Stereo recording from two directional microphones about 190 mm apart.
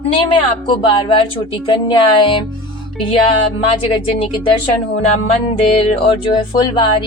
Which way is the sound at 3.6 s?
30° left (ahead or behind).